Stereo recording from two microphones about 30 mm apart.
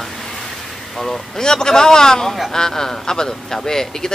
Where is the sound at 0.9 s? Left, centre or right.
Centre.